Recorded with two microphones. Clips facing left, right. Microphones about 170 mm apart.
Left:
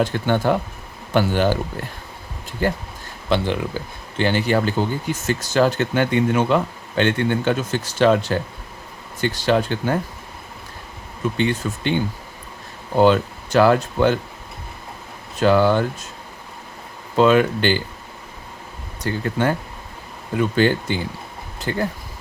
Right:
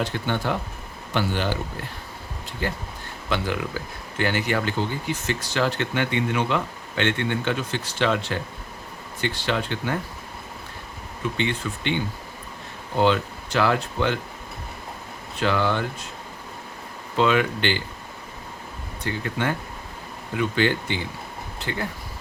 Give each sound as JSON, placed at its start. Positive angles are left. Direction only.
{"t": 0.0, "sound": "speech", "side_deg": 45}
{"t": 3.2, "sound": "speech", "side_deg": 30}
{"t": 11.3, "sound": "speech", "side_deg": 40}
{"t": 13.0, "sound": "speech", "side_deg": 45}
{"t": 15.4, "sound": "speech", "side_deg": 40}
{"t": 17.2, "sound": "speech", "side_deg": 40}
{"t": 19.0, "sound": "speech", "side_deg": 40}